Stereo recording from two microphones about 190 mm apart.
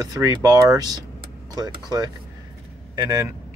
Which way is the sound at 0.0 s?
20° right (ahead or behind).